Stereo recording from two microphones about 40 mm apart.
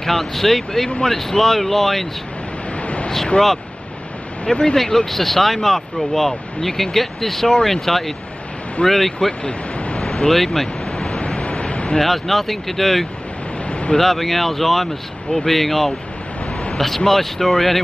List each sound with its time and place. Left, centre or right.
0.0 s speech: centre
2.8 s vehicle: left
4.5 s speech: left
5.1 s speech: centre
9.4 s speech: left
9.9 s a sound: centre
10.3 s speech: centre
10.9 s waves: left
12.0 s speech: centre
13.7 s a sound: left
13.9 s speech: centre